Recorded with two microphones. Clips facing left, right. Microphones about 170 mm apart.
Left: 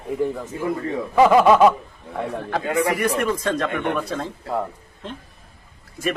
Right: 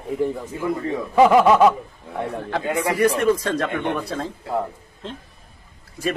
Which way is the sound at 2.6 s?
25° right (ahead or behind).